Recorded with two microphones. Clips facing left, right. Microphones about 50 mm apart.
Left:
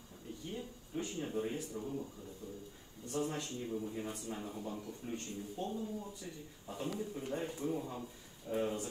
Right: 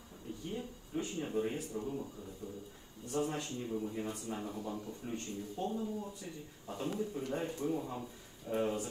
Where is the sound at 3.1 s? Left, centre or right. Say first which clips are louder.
Right 2 dB; right.